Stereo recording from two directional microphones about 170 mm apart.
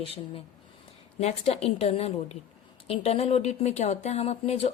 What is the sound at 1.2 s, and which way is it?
Speech, 40° left (ahead or behind).